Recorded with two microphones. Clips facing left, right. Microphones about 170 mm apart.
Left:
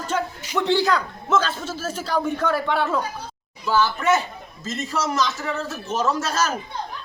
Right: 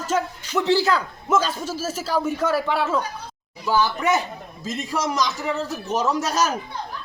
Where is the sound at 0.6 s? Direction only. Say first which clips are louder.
Even; 5° right (ahead or behind).